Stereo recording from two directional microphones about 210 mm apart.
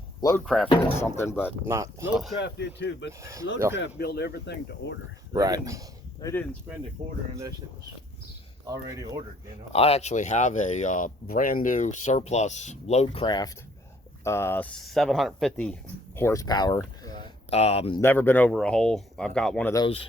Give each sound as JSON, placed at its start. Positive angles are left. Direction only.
{"t": 0.2, "sound": "speech", "side_deg": 15}
{"t": 0.4, "sound": "speech", "side_deg": 0}
{"t": 0.9, "sound": "speech", "side_deg": 10}
{"t": 1.6, "sound": "speech", "side_deg": -15}
{"t": 2.4, "sound": "speech", "side_deg": 55}
{"t": 3.1, "sound": "speech", "side_deg": -15}
{"t": 3.8, "sound": "speech", "side_deg": 50}
{"t": 5.3, "sound": "speech", "side_deg": -15}
{"t": 6.2, "sound": "speech", "side_deg": 20}
{"t": 7.0, "sound": "speech", "side_deg": -30}
{"t": 8.6, "sound": "speech", "side_deg": -15}
{"t": 9.7, "sound": "speech", "side_deg": 30}
{"t": 18.0, "sound": "speech", "side_deg": 10}
{"t": 19.7, "sound": "speech", "side_deg": 25}